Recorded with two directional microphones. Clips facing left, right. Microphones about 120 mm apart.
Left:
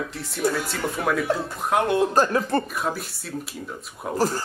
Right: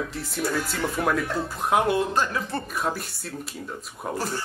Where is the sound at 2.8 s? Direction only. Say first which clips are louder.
Left 1 dB; centre (ahead or behind).